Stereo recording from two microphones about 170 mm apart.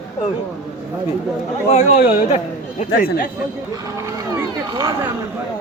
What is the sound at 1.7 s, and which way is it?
Speech, 40° left (ahead or behind).